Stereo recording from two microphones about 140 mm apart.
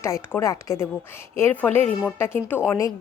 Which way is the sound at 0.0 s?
20° left (ahead or behind).